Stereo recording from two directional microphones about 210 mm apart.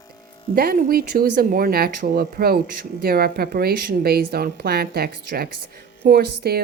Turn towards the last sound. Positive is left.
turn(degrees=-50)  # may be behind; listen again after turning